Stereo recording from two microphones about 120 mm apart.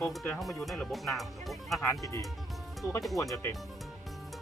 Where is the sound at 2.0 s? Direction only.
25° left (ahead or behind).